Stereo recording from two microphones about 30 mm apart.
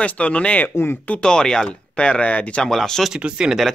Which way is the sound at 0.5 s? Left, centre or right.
Left.